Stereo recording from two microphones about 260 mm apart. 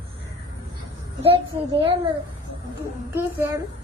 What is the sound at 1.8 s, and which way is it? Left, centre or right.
Speech, right.